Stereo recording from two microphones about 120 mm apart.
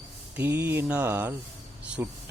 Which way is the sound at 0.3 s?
20° right (ahead or behind).